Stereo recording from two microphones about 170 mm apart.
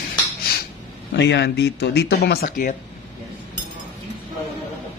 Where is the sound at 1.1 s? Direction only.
85° left; by 2.7 s 60° left (ahead or behind).